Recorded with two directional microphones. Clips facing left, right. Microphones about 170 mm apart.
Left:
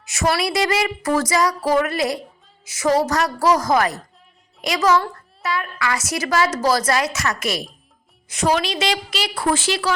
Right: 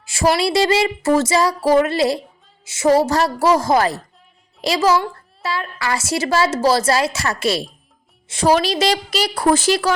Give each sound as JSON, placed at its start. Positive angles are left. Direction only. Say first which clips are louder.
{"t": 0.0, "sound": "a woman's voice", "louder": "right 4 dB", "side_deg": -30}